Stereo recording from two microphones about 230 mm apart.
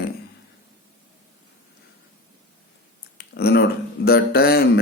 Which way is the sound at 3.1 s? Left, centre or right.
Left.